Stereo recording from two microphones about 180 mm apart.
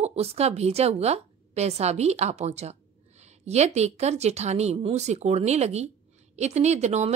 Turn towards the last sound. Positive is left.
turn(degrees=-40)  # may be behind; listen again after turning